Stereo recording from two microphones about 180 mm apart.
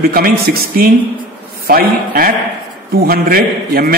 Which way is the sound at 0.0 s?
55° right (ahead or behind).